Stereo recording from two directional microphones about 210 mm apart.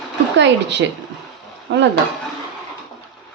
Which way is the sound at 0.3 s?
55° right (ahead or behind).